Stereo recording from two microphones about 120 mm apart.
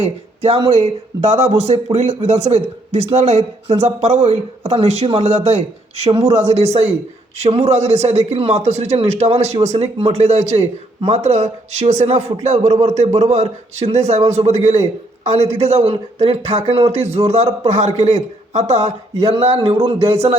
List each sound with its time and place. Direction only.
0.4 s a man's voice: 60° right (ahead or behind)
7.3 s a man's voice: 65° right (ahead or behind)
12.4 s a sound: 65° right (ahead or behind)
13.1 s a man's voice: 65° right (ahead or behind)
19.3 s a man's voice: 55° right (ahead or behind)